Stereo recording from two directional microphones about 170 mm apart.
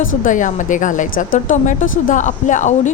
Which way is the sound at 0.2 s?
50° left (ahead or behind).